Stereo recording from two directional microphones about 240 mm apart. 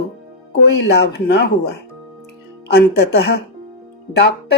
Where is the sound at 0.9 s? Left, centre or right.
Left.